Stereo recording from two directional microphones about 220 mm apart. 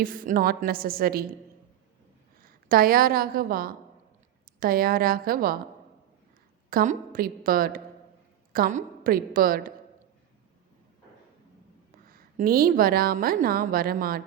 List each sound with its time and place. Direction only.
0.0 s a woman's voice: 40° right (ahead or behind)
2.4 s a woman's voice: 40° right (ahead or behind)
6.7 s a woman's voice: 40° right (ahead or behind)
12.0 s a woman's voice: 40° right (ahead or behind)